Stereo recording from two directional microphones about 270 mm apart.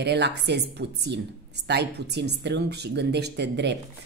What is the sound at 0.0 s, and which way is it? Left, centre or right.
Speech, right.